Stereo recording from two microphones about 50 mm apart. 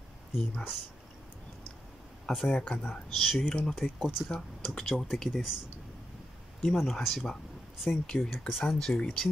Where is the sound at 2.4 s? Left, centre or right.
Left.